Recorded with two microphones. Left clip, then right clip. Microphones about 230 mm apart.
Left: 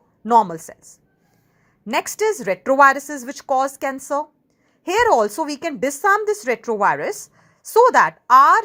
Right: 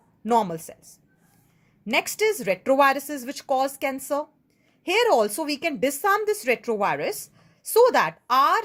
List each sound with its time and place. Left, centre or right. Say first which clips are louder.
0.3 s a woman's voice: left 7 dB; centre